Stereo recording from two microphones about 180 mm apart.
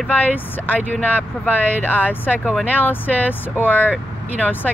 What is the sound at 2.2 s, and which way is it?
Speech, 5° right (ahead or behind).